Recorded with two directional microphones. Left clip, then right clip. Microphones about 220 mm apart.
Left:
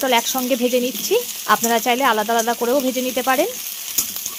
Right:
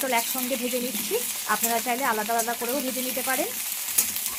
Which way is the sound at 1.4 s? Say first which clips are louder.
Left 9 dB; 50° left (ahead or behind).